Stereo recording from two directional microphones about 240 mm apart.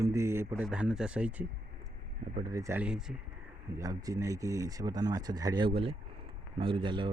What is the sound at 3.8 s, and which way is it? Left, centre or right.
Speech, centre.